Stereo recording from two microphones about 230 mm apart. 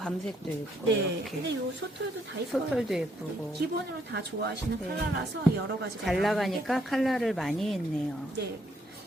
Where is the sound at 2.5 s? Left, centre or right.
Centre.